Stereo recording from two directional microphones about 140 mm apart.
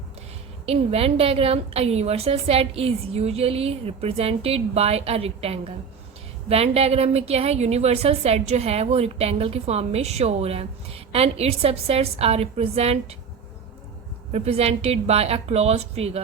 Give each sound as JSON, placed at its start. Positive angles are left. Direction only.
{"t": 0.6, "sound": "a woman's voice", "side_deg": -45}
{"t": 14.3, "sound": "a woman's voice", "side_deg": -50}